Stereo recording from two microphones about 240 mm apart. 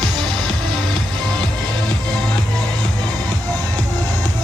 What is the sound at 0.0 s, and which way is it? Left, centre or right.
Music, centre.